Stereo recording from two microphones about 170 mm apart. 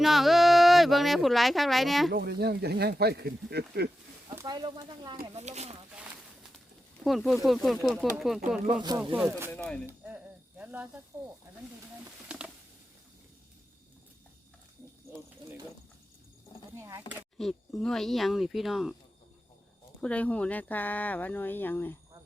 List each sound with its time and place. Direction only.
0.0 s speech: centre (ahead or behind)
2.1 s speech: 65° right (ahead or behind)
4.4 s speech: 25° right (ahead or behind)
5.3 s speech: 40° right (ahead or behind)
5.9 s a sound: 5° right (ahead or behind)
7.0 s speech: centre (ahead or behind)
8.6 s speech: 25° right (ahead or behind)
9.1 s speech: centre (ahead or behind)
10.6 s speech: 10° right (ahead or behind)
12.3 s patter: 5° right (ahead or behind)
16.7 s a sound: 15° right (ahead or behind)
17.3 s speech: centre (ahead or behind)
20.0 s speech: 5° left (ahead or behind)